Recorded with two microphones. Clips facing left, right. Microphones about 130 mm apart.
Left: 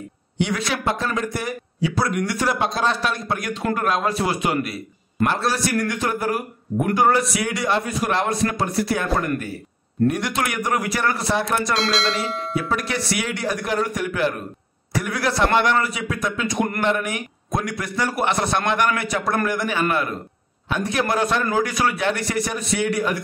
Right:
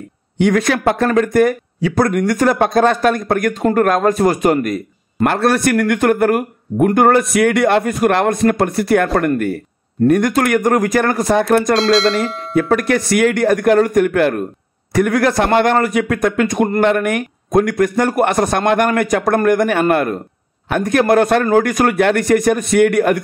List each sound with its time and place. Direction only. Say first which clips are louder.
0.4 s a man's voice: right 9 dB; 50° right (ahead or behind)
5.3 s a man's voice: right 10 dB; 55° right (ahead or behind)
11.7 s speech: right 9 dB; centre (ahead or behind)
12.5 s a man's voice: right 11 dB; 50° right (ahead or behind)